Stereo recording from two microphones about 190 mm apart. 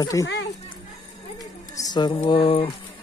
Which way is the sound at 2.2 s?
30° left (ahead or behind).